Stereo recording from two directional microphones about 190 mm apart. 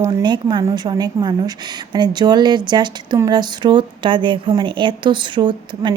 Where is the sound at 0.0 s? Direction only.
25° right (ahead or behind).